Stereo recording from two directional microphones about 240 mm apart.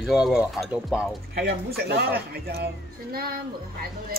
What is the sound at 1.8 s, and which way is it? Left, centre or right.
Speech, right.